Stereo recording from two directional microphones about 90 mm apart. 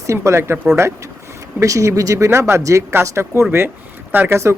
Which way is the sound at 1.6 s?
35° right (ahead or behind).